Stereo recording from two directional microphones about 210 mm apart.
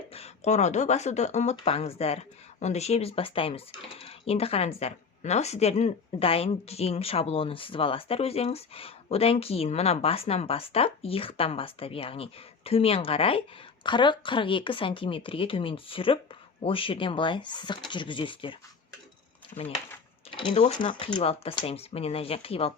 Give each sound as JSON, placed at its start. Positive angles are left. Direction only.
{"t": 0.1, "sound": "speech", "side_deg": 30}
{"t": 20.3, "sound": "speech", "side_deg": 25}